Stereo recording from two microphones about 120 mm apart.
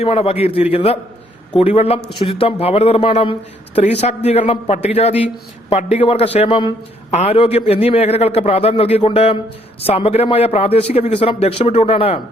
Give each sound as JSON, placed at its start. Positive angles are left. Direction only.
{"t": 0.0, "sound": "speech", "side_deg": 55}
{"t": 7.1, "sound": "a man's voice", "side_deg": 75}
{"t": 7.3, "sound": "speech", "side_deg": 55}